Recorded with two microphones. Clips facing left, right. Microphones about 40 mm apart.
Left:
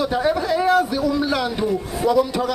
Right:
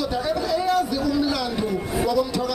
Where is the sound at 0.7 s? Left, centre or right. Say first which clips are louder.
Left 5 dB; left.